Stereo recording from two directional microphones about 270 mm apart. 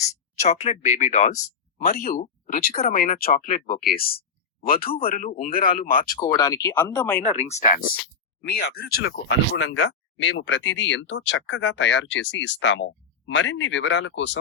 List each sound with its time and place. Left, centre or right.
0.4 s speech: left
6.0 s speech: centre
7.3 s speech: left
8.4 s speech: left